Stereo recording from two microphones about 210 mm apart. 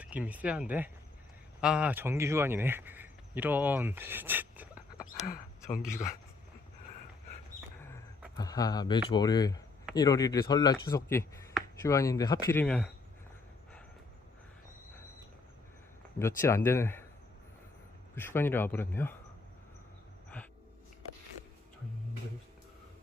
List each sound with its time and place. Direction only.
0.0 s speech: 5° right (ahead or behind)
5.8 s speech: centre (ahead or behind)
8.4 s speech: 15° left (ahead or behind)
16.1 s speech: 15° left (ahead or behind)
18.1 s speech: 10° left (ahead or behind)